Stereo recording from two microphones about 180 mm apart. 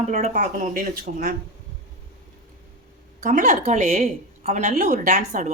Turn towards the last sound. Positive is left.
turn(degrees=-40)  # may be behind; listen again after turning